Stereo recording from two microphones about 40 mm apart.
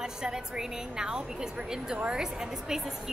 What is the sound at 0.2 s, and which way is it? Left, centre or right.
A woman's voice, centre.